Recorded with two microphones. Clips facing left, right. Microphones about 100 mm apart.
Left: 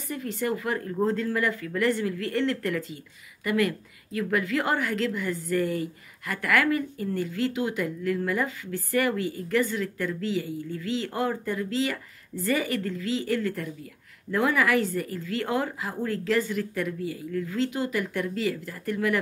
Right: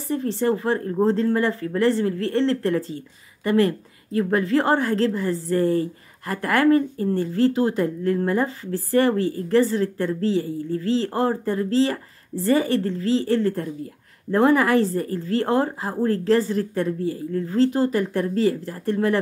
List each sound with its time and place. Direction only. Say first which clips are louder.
0.1 s a woman's voice: right 7 dB; 30° right (ahead or behind)